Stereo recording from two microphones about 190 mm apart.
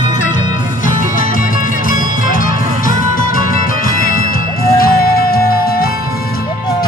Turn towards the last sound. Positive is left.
turn(degrees=50)  # may be behind; listen again after turning